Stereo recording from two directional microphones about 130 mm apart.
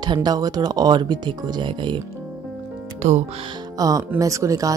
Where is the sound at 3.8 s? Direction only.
30° right (ahead or behind).